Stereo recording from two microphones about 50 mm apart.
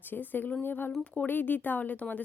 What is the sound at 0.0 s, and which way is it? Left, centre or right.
A woman's voice, left.